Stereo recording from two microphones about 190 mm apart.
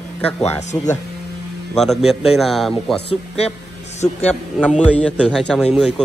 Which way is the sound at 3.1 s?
35° left (ahead or behind).